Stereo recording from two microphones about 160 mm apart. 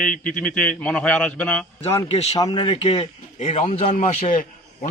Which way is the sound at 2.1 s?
40° left (ahead or behind).